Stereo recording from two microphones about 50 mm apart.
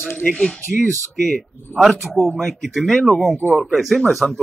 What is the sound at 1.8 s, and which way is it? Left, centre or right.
Speech, centre.